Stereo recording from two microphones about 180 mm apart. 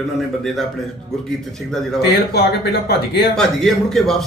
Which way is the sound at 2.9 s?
60° left (ahead or behind).